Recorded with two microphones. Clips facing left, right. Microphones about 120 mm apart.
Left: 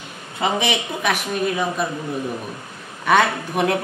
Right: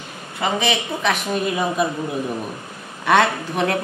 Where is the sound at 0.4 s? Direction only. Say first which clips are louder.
Even; 15° left (ahead or behind).